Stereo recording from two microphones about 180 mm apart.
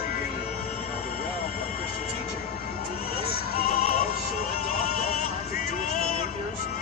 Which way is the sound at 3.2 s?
55° left (ahead or behind).